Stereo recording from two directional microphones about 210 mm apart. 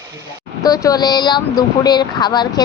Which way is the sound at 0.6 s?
15° left (ahead or behind).